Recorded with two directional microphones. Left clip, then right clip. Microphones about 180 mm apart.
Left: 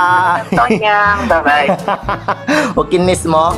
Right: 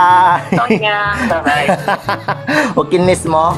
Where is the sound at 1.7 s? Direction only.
5° right (ahead or behind).